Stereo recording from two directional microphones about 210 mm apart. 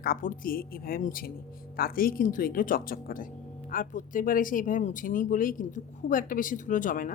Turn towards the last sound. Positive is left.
turn(degrees=40)  # may be behind; listen again after turning